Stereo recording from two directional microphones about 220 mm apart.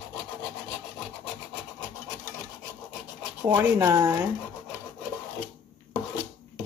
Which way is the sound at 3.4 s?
10° right (ahead or behind).